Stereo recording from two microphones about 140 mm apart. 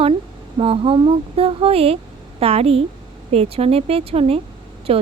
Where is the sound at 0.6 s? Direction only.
40° right (ahead or behind).